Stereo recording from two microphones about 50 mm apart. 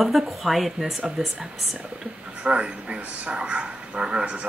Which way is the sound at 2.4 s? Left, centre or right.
Right.